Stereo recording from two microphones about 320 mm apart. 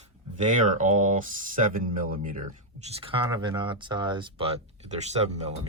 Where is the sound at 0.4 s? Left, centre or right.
Right.